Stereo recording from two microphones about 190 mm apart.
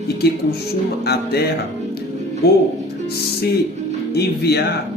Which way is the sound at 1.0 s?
60° left (ahead or behind).